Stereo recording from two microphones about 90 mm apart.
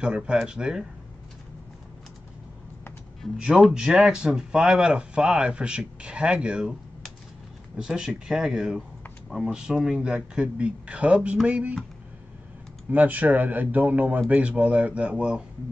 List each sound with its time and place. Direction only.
0.0 s speech: 10° right (ahead or behind)
3.3 s speech: 10° right (ahead or behind)
7.7 s speech: 5° right (ahead or behind)
12.9 s speech: 20° right (ahead or behind)